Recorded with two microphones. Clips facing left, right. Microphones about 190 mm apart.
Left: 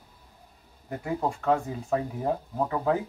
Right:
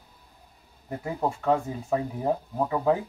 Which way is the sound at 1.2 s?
5° right (ahead or behind).